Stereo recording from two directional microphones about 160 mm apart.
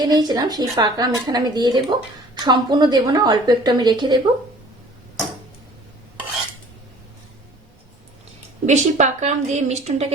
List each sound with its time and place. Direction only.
0.0 s a woman's voice: 25° right (ahead or behind)
8.6 s a woman's voice: 45° right (ahead or behind)